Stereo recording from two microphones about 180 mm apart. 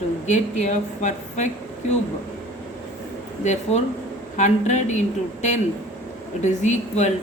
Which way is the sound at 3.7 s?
35° left (ahead or behind).